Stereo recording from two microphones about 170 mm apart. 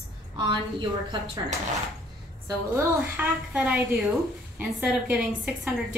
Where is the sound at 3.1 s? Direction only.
5° right (ahead or behind).